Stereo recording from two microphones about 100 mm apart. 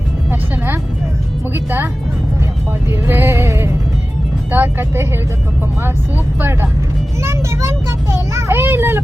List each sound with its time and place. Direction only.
0.3 s music: 20° right (ahead or behind)
3.1 s music: 25° right (ahead or behind)
7.2 s a sound: 25° right (ahead or behind)